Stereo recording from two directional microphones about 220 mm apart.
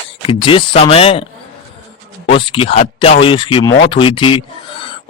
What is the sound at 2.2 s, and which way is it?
Speech, 25° left (ahead or behind).